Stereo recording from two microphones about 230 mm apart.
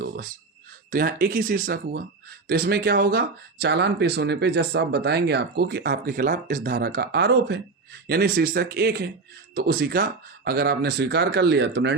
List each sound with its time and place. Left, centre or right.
0.9 s speech: right